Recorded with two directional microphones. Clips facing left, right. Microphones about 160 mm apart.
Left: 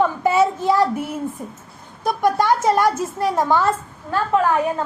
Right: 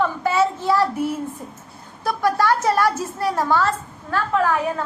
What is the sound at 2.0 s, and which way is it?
A woman's voice, 20° left (ahead or behind).